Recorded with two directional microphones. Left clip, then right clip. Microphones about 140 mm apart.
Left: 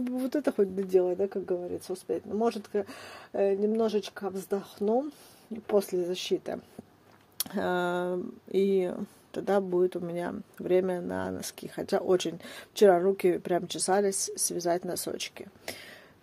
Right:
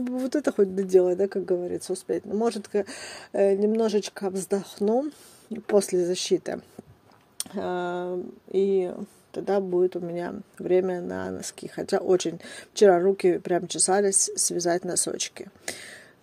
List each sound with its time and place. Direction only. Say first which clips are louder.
0.0 s speech: right 3 dB; 30° right (ahead or behind)
7.3 s speech: even; centre (ahead or behind); by 16.0 s 25° right (ahead or behind)